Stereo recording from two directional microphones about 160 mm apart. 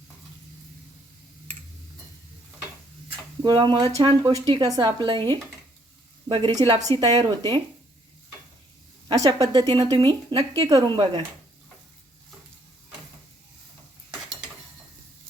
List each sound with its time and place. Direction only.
3.4 s a woman's voice: 30° right (ahead or behind)
9.0 s speech: 20° right (ahead or behind)